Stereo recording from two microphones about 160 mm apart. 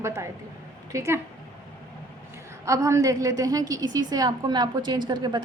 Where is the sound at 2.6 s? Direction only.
20° right (ahead or behind).